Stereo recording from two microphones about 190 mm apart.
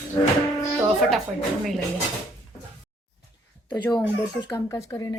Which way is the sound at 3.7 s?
20° left (ahead or behind).